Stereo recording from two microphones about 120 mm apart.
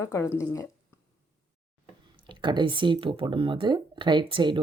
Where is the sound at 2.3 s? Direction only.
40° right (ahead or behind).